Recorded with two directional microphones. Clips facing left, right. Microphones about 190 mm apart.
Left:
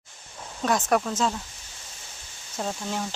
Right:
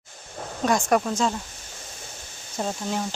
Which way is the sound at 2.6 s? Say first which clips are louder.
Right 3 dB; 5° right (ahead or behind).